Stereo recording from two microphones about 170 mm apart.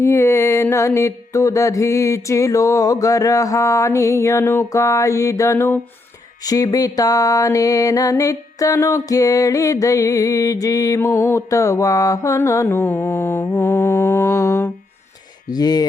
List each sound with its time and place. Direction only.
0.0 s music: 15° left (ahead or behind)